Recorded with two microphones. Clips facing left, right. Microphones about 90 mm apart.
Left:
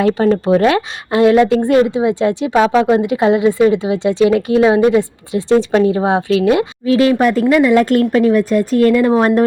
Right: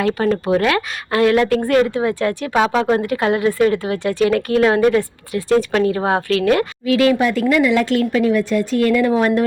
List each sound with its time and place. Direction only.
0.0 s speech: 30° left (ahead or behind)
6.8 s a woman's voice: 30° left (ahead or behind)
7.2 s a woman's voice: 45° left (ahead or behind)